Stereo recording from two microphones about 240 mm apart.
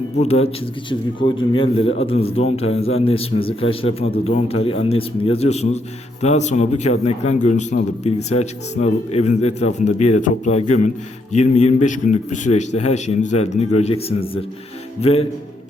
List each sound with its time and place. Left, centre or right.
0.2 s a man's voice: left